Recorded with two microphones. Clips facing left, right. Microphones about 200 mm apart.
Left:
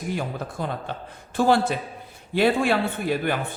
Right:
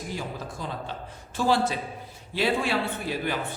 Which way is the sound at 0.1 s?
60° left (ahead or behind).